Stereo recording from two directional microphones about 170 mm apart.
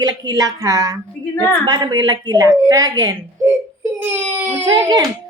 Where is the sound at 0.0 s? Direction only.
20° right (ahead or behind).